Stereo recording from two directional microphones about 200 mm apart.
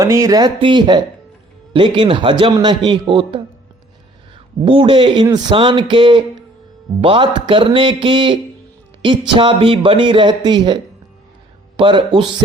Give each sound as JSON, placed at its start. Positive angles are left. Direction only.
{"t": 0.0, "sound": "a man's voice", "side_deg": -15}
{"t": 4.6, "sound": "a man's voice", "side_deg": -25}
{"t": 11.8, "sound": "a man's voice", "side_deg": -25}